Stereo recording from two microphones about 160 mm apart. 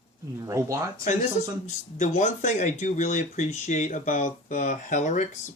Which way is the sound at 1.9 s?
50° left (ahead or behind).